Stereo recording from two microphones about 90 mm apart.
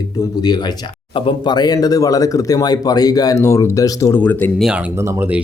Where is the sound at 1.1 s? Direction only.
60° left (ahead or behind); by 4.1 s 35° left (ahead or behind).